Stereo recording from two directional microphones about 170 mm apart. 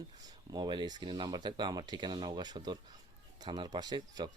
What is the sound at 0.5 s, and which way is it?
Speech, 25° right (ahead or behind).